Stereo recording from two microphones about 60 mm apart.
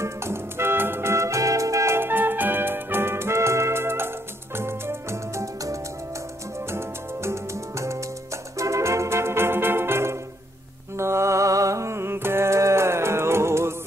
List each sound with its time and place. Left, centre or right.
0.0 s music: right
2.0 s music: right
8.5 s organ: right
11.0 s music: right